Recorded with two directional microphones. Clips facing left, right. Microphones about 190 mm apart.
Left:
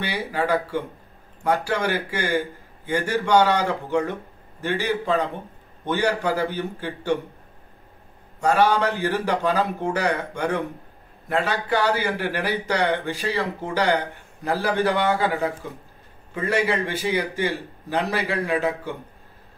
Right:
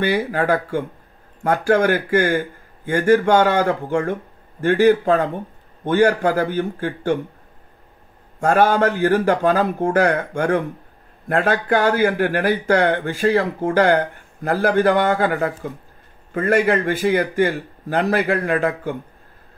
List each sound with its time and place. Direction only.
0.3 s speech: 50° right (ahead or behind)
8.4 s speech: 50° right (ahead or behind)